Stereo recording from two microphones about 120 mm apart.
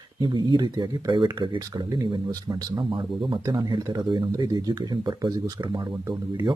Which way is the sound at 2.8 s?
45° right (ahead or behind).